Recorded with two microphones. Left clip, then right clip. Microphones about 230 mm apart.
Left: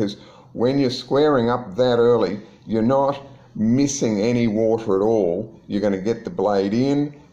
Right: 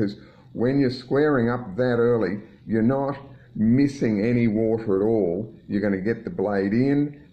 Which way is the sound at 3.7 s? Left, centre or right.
Centre.